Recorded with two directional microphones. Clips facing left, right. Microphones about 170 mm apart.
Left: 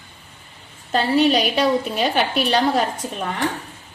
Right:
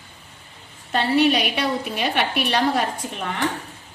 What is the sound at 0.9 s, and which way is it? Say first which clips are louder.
A woman's voice: left 2 dB; 35° left (ahead or behind).